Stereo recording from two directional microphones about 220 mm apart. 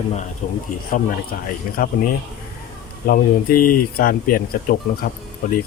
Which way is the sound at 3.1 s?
40° left (ahead or behind).